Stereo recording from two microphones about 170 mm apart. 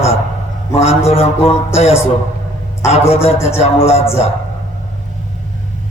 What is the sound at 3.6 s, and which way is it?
Speech, 40° left (ahead or behind).